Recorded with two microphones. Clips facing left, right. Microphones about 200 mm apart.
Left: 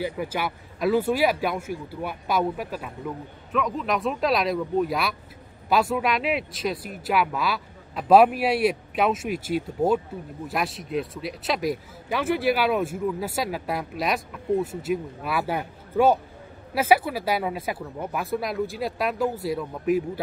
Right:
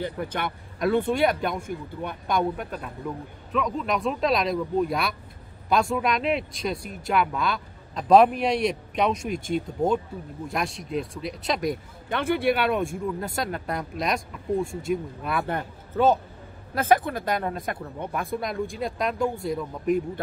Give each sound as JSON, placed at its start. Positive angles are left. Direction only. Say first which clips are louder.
{"t": 0.0, "sound": "speech", "louder": "left 1 dB", "side_deg": 5}